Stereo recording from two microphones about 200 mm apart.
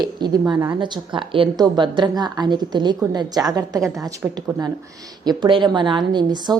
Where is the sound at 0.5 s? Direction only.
15° right (ahead or behind).